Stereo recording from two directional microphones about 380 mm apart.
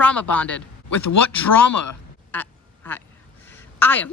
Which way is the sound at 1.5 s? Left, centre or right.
Left.